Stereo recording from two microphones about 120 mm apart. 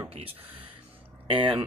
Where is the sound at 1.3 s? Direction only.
45° right (ahead or behind).